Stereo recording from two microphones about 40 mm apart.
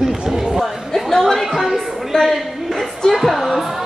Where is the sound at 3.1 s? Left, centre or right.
Centre.